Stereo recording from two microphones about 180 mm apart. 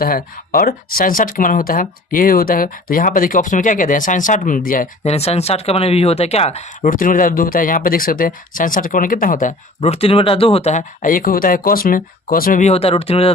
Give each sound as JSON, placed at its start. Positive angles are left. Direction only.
{"t": 0.0, "sound": "speech", "side_deg": 55}
{"t": 5.0, "sound": "speech", "side_deg": 35}